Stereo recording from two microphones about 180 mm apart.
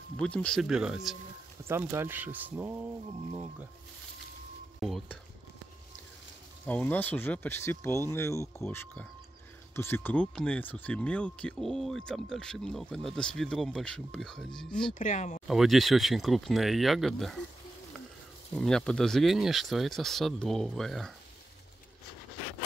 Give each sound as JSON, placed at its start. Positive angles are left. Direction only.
{"t": 0.2, "sound": "speech", "side_deg": 5}
{"t": 1.6, "sound": "speech", "side_deg": -15}
{"t": 4.7, "sound": "speech", "side_deg": 0}
{"t": 6.6, "sound": "speech", "side_deg": 10}
{"t": 15.0, "sound": "speech", "side_deg": 45}
{"t": 15.4, "sound": "speech", "side_deg": 0}
{"t": 18.5, "sound": "speech", "side_deg": 5}